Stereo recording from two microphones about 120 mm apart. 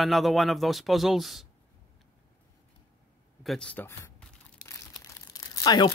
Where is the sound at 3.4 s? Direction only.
5° left (ahead or behind).